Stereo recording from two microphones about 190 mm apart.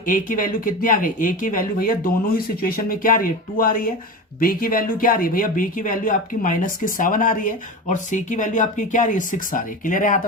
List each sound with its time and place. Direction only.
0.0 s speech: 45° left (ahead or behind)